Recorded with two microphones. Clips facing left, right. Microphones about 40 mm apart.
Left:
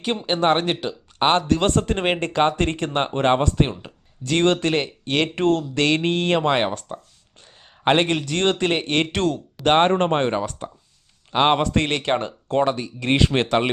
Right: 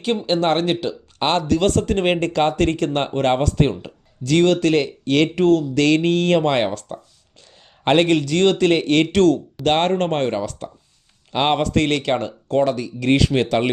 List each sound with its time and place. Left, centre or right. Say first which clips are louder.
0.3 s speech: even; centre
1.5 s speech: right 2 dB; left
5.4 s a man's voice: right 4 dB; left; by 8.2 s centre
8.2 s speech: right 4 dB; left